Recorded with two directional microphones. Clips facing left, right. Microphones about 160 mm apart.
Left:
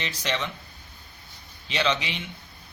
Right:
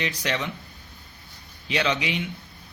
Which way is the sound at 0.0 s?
10° right (ahead or behind).